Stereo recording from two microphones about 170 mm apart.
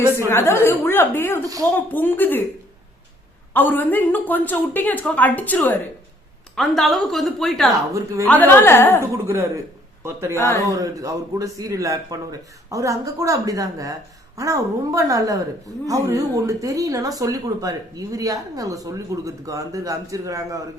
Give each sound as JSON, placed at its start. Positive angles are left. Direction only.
{"t": 0.3, "sound": "speech", "side_deg": 15}
{"t": 3.5, "sound": "a woman's voice", "side_deg": 10}
{"t": 7.9, "sound": "a woman's voice", "side_deg": -15}
{"t": 8.3, "sound": "speech", "side_deg": 10}
{"t": 10.0, "sound": "a woman's voice", "side_deg": -15}
{"t": 10.3, "sound": "speech", "side_deg": 15}
{"t": 10.7, "sound": "speech", "side_deg": -20}